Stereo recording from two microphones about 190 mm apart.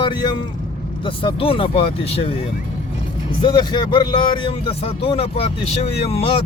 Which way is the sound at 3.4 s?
25° left (ahead or behind).